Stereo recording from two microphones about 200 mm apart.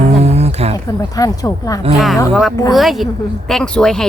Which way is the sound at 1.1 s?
15° left (ahead or behind).